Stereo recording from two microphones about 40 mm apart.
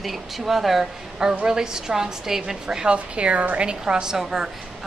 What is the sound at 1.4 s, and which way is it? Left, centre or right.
A woman's voice, centre.